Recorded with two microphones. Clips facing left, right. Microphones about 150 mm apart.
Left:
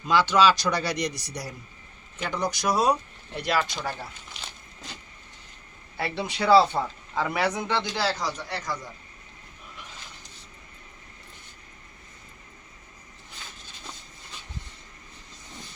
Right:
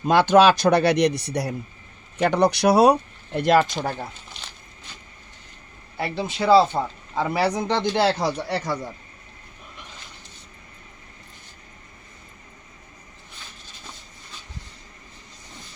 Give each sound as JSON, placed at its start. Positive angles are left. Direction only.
{"t": 0.0, "sound": "speech", "side_deg": -55}
{"t": 6.0, "sound": "speech", "side_deg": -20}
{"t": 8.4, "sound": "speech", "side_deg": -30}